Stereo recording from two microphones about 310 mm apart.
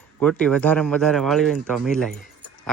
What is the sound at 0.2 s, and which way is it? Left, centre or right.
Speech, centre.